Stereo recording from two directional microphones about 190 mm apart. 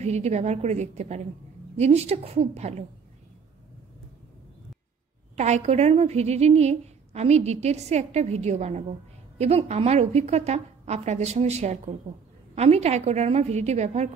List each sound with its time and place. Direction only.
0.0 s a woman's voice: 35° right (ahead or behind)
5.4 s a woman's voice: 35° right (ahead or behind)